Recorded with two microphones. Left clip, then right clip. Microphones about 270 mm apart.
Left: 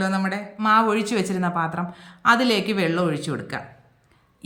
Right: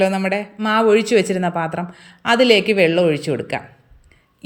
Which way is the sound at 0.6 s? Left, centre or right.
Centre.